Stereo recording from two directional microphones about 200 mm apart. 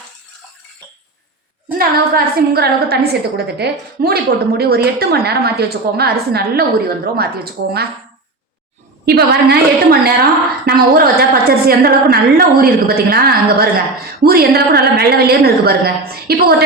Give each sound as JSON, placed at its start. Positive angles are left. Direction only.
{"t": 1.8, "sound": "a woman's voice", "side_deg": -50}
{"t": 9.0, "sound": "a woman's voice", "side_deg": -55}